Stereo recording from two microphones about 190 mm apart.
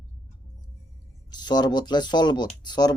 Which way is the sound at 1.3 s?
20° left (ahead or behind).